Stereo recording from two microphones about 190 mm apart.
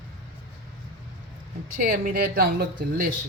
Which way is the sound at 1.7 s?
50° right (ahead or behind).